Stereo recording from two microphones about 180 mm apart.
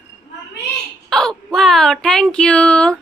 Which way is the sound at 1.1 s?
5° left (ahead or behind).